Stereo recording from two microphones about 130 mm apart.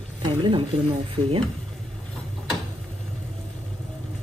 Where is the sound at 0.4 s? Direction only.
40° right (ahead or behind).